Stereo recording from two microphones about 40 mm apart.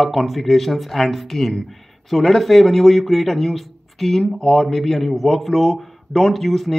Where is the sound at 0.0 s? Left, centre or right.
Centre.